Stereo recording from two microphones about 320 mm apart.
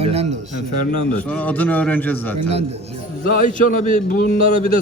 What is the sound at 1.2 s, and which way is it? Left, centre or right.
A man's voice, centre.